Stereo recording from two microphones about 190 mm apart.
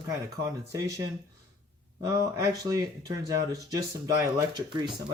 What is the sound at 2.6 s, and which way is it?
Speech, 20° right (ahead or behind).